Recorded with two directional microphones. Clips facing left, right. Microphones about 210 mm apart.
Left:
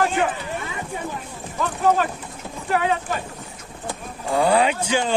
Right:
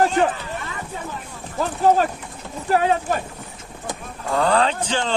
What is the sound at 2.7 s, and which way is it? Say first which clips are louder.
Speech: right 3 dB; 40° right (ahead or behind).